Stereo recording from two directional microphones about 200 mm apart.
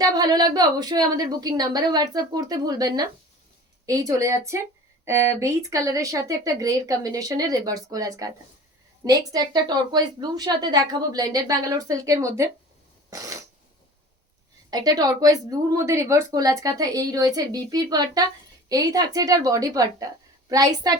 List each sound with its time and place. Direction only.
0.0 s a woman's voice: 20° right (ahead or behind)
13.1 s a sound: 15° right (ahead or behind)
14.7 s a woman's voice: 20° right (ahead or behind)